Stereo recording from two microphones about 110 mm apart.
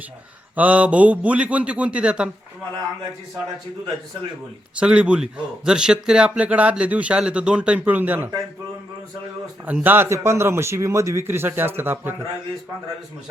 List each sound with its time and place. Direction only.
0.5 s a man's voice: 15° right (ahead or behind)
4.8 s a man's voice: 10° right (ahead or behind)
9.6 s a man's voice: 15° right (ahead or behind)